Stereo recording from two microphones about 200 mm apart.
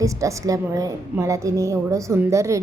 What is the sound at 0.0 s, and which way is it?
A woman's voice, 15° right (ahead or behind).